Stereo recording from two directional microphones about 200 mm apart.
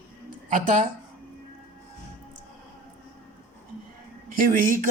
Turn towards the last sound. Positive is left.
turn(degrees=-45)  # may be behind; listen again after turning